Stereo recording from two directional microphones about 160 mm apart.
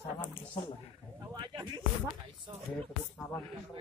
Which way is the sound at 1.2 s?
25° right (ahead or behind).